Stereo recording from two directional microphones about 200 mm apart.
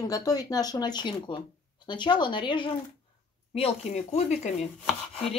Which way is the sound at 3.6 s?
35° left (ahead or behind).